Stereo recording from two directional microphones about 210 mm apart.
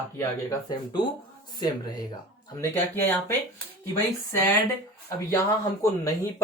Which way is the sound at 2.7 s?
10° left (ahead or behind).